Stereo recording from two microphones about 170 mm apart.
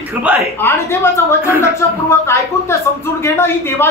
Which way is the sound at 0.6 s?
15° left (ahead or behind).